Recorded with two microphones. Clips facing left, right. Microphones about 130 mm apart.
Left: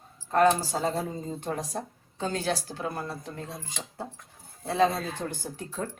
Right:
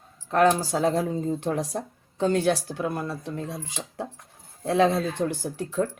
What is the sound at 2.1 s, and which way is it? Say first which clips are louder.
A woman's voice: right 7 dB; 65° right (ahead or behind).